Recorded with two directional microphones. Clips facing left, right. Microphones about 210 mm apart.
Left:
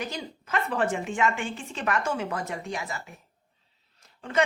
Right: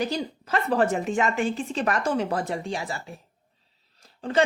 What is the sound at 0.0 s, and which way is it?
A woman's voice, 35° right (ahead or behind).